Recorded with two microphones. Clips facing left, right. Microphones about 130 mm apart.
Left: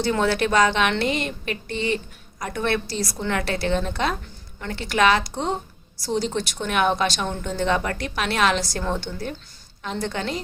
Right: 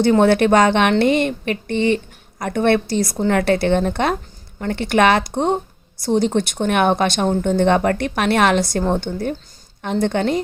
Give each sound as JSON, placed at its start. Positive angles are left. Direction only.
{"t": 0.1, "sound": "a woman's voice", "side_deg": -55}